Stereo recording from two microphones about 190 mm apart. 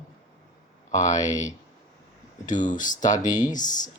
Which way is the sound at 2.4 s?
40° left (ahead or behind).